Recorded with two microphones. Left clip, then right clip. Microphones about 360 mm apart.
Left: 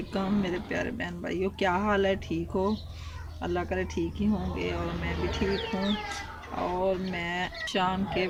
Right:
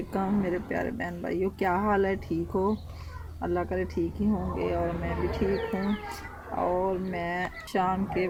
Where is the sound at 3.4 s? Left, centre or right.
Centre.